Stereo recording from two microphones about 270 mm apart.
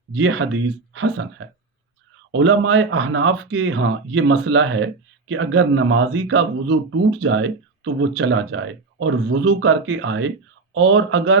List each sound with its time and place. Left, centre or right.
0.1 s speech: right